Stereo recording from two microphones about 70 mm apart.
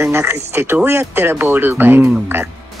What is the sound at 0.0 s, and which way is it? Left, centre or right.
Speech, right.